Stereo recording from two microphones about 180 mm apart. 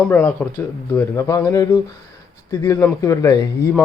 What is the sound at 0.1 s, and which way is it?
Speech, 10° left (ahead or behind).